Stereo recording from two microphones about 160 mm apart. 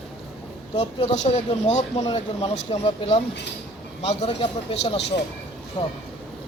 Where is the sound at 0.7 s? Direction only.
35° left (ahead or behind).